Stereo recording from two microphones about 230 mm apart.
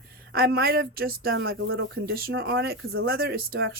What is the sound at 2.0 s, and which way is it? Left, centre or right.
Speech, right.